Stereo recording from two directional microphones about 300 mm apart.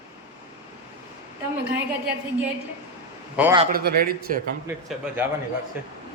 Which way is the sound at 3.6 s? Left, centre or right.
Right.